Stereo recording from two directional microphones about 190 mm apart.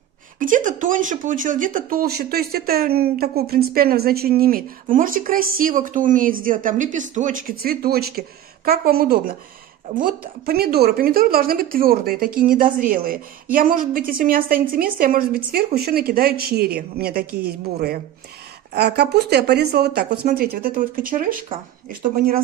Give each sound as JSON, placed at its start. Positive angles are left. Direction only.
{"t": 0.4, "sound": "a woman's voice", "side_deg": -45}